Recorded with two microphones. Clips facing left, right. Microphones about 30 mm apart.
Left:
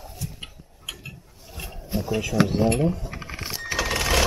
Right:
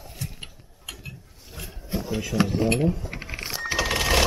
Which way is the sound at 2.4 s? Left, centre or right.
Left.